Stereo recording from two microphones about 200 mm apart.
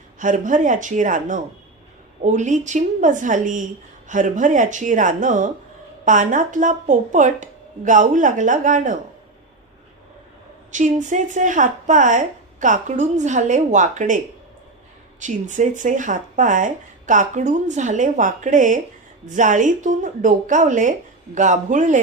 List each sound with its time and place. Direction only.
0.2 s speech: 40° right (ahead or behind)
10.7 s speech: 40° right (ahead or behind)
15.2 s speech: 40° right (ahead or behind)